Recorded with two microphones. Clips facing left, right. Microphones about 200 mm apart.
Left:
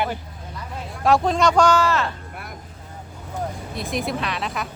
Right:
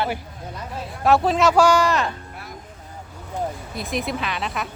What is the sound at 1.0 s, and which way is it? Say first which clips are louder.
A man's voice: right 1 dB; 5° right (ahead or behind).